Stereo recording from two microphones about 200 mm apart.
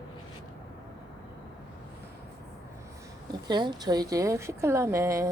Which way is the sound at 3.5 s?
20° right (ahead or behind).